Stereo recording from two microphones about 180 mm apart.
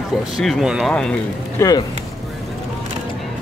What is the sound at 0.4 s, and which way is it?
Speech, centre (ahead or behind).